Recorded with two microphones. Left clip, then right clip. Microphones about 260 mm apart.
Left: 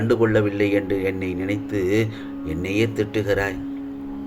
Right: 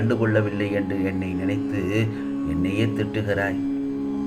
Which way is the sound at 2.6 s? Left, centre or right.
Left.